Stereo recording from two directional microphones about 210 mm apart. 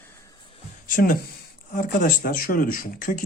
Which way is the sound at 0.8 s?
40° left (ahead or behind).